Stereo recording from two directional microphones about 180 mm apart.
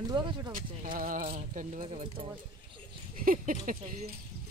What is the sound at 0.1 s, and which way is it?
Speech, 25° right (ahead or behind).